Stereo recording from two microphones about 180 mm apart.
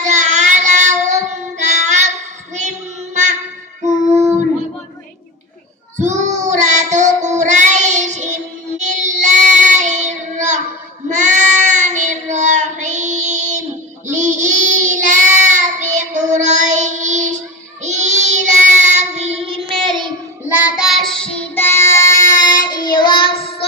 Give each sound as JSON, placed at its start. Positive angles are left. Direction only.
{"t": 0.0, "sound": "child singing", "side_deg": -40}
{"t": 3.8, "sound": "child singing", "side_deg": -15}
{"t": 6.0, "sound": "child singing", "side_deg": -40}
{"t": 20.5, "sound": "child singing", "side_deg": -5}
{"t": 22.5, "sound": "child singing", "side_deg": 50}
{"t": 23.0, "sound": "child singing", "side_deg": 25}